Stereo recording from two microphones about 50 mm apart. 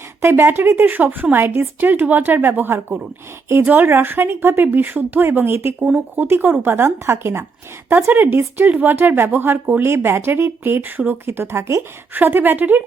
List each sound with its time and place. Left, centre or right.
0.2 s speech: right
8.1 s speech: right
9.8 s speech: right
11.3 s speech: right
12.1 s speech: right